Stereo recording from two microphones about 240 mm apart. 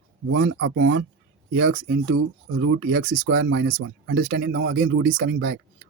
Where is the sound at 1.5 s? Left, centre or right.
Right.